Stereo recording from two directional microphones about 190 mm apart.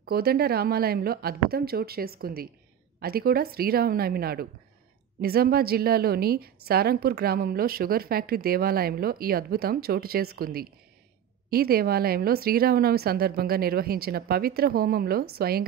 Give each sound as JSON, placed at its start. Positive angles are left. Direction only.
{"t": 0.0, "sound": "a woman's voice", "side_deg": -55}